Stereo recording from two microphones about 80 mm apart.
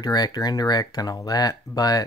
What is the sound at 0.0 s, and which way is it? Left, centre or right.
Speech, left.